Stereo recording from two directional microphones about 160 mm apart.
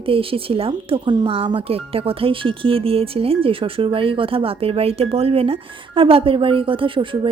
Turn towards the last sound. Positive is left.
turn(degrees=-30)  # may be behind; listen again after turning